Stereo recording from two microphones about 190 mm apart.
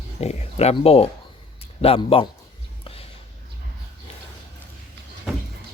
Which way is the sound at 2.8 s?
30° left (ahead or behind).